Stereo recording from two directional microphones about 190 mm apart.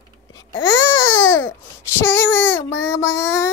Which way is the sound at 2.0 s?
15° left (ahead or behind).